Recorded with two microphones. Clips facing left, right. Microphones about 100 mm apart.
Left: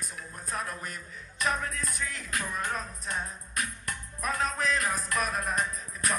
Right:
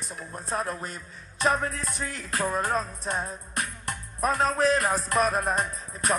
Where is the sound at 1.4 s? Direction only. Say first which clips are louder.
Right 5 dB; 30° right (ahead or behind).